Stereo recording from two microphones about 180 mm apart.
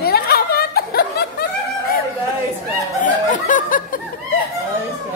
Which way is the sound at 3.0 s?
45° left (ahead or behind).